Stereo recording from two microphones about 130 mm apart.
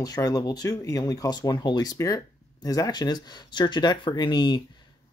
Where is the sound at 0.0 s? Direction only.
25° left (ahead or behind).